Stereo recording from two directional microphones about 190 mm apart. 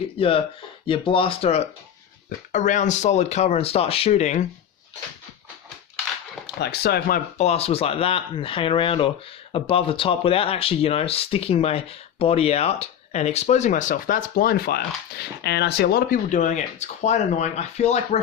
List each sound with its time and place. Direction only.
0.2 s speech: 30° left (ahead or behind)
6.6 s speech: 60° left (ahead or behind)
7.3 s speech: 35° left (ahead or behind)